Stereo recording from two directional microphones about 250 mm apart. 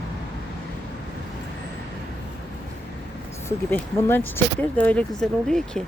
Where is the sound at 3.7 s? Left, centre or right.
Centre.